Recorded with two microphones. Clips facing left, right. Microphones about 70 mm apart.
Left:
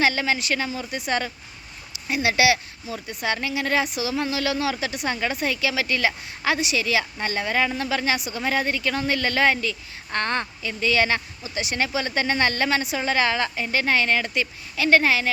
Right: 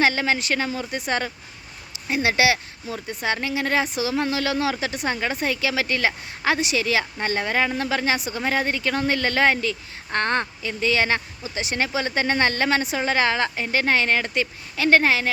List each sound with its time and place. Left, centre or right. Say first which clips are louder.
0.0 s speech: right 1 dB; right
3.2 s speech: right 1 dB; right